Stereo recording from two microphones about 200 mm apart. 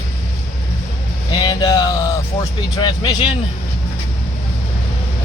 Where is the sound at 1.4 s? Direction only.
20° left (ahead or behind).